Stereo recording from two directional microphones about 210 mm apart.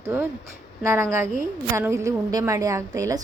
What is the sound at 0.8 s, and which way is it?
A woman's voice, 10° right (ahead or behind).